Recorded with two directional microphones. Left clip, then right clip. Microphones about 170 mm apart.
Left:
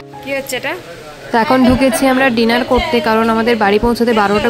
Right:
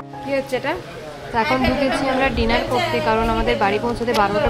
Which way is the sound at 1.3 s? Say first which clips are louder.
Left 7 dB; 55° left (ahead or behind).